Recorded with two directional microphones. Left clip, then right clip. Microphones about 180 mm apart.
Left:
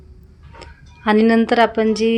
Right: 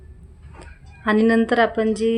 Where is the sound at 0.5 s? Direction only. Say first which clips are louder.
Left 4 dB; 15° left (ahead or behind).